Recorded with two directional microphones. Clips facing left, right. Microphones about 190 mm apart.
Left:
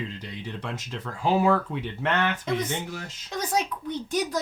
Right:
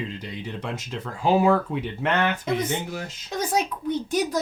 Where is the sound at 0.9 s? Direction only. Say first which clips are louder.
Right 3 dB; 15° right (ahead or behind).